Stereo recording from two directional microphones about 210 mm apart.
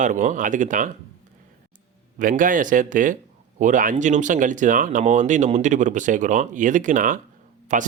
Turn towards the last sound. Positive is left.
turn(degrees=-35)  # may be behind; listen again after turning